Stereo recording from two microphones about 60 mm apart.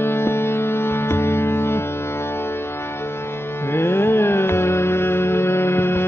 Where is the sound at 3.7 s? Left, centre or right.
Left.